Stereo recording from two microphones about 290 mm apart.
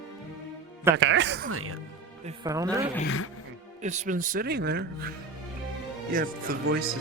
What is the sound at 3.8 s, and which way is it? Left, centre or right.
Speech, right.